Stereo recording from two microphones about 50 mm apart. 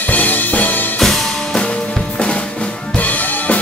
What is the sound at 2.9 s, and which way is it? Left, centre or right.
Drum kit, left.